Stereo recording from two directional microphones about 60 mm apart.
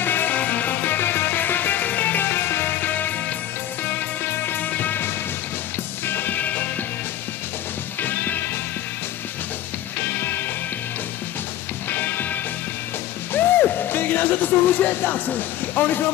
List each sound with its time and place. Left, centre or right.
0.0 s music: left
8.0 s music: left
10.0 s music: left
11.9 s music: left